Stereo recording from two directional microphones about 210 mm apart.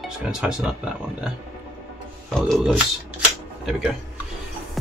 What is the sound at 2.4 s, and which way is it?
Speech, centre (ahead or behind).